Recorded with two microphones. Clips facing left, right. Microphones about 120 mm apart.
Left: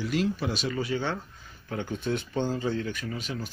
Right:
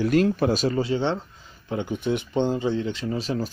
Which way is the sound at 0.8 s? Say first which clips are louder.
Right 6 dB; 25° right (ahead or behind).